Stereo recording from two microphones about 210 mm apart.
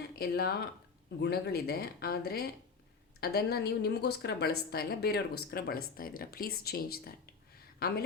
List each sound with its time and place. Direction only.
0.2 s a woman's voice: 50° left (ahead or behind)